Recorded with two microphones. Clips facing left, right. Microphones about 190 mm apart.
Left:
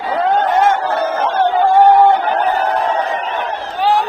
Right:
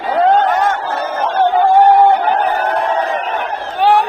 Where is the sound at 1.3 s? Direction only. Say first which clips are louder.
Right 4 dB; 55° right (ahead or behind).